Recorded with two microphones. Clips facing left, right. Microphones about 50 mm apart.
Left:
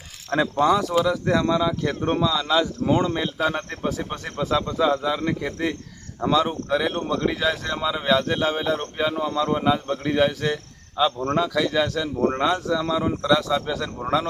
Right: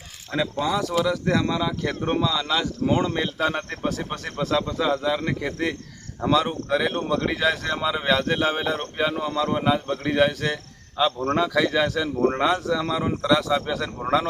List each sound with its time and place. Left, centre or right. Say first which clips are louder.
0.7 s speech: left 3 dB; centre
3.8 s speech: left 1 dB; centre